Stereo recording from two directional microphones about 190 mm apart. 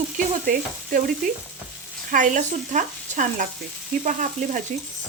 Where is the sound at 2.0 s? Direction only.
45° right (ahead or behind).